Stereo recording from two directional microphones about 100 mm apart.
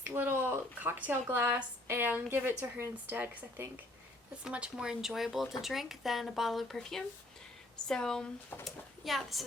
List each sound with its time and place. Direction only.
0.0 s speech: 20° right (ahead or behind); by 9.4 s centre (ahead or behind)